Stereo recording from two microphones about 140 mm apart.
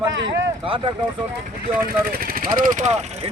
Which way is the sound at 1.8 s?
90° right.